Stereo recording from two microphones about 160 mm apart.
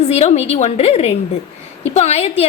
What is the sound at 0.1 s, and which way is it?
A woman's voice, 40° left (ahead or behind).